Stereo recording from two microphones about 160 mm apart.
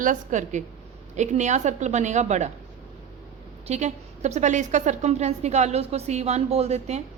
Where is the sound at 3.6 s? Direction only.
45° right (ahead or behind).